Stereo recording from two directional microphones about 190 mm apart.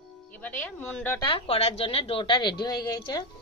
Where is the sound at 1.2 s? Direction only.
30° left (ahead or behind).